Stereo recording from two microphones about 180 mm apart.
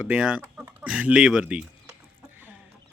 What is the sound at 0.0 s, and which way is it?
Speech, 5° right (ahead or behind).